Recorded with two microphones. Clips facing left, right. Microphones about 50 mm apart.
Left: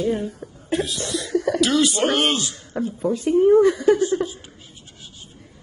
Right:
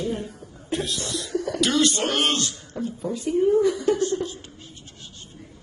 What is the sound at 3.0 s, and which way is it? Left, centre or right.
Speech, left.